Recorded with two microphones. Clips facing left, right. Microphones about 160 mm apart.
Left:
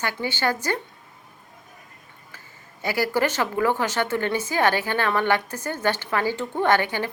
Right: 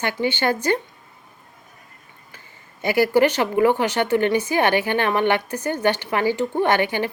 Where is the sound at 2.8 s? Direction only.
20° right (ahead or behind).